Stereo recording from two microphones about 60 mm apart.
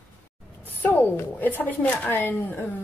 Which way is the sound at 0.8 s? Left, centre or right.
Left.